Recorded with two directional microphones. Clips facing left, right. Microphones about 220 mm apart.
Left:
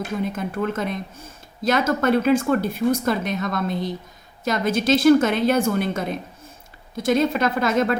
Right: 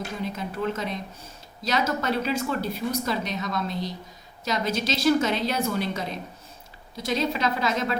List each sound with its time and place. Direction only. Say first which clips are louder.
0.3 s speech: left 4 dB; 50° left (ahead or behind)